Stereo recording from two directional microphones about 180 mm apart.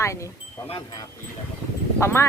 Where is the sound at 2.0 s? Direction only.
15° left (ahead or behind).